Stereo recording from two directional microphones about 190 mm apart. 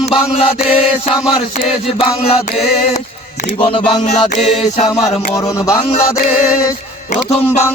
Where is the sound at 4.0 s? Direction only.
40° left (ahead or behind).